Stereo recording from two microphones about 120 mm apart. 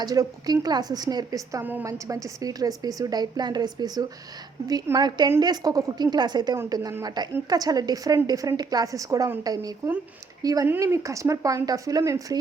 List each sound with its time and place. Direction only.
0.0 s a woman's voice: 30° right (ahead or behind)
1.6 s a woman's voice: 15° right (ahead or behind)
1.9 s a woman's voice: 25° right (ahead or behind)